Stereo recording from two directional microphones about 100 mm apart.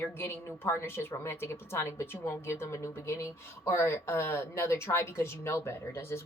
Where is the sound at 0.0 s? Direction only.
25° left (ahead or behind).